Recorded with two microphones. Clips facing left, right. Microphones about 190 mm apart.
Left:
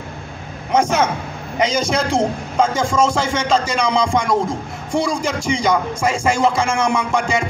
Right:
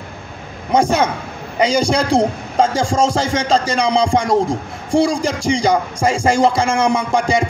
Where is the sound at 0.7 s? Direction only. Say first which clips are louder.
Right 2 dB; 35° right (ahead or behind).